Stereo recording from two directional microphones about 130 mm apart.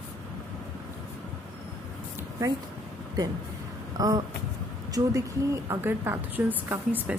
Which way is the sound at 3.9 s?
30° right (ahead or behind).